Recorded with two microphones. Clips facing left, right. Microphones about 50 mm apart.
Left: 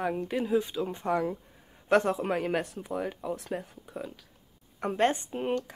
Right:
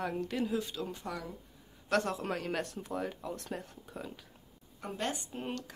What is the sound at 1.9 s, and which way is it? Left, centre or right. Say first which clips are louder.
Speech: left 7 dB; left.